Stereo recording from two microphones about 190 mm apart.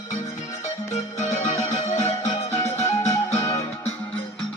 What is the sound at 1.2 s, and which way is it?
Music, 35° left (ahead or behind).